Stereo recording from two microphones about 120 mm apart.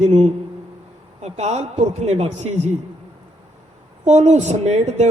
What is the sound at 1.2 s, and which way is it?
A man's voice, 65° right (ahead or behind).